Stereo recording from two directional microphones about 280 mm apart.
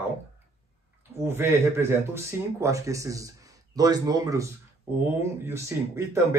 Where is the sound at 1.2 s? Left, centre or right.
Centre.